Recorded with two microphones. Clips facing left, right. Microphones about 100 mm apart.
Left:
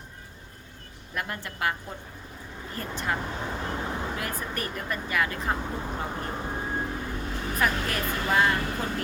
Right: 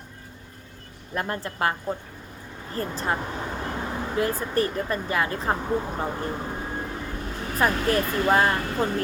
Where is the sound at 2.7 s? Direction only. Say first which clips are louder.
Right 4 dB; 35° right (ahead or behind).